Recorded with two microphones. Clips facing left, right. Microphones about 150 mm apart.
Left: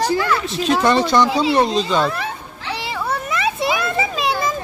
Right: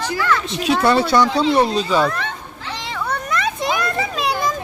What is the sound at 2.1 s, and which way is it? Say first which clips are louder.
Children playing: even; 10° left (ahead or behind).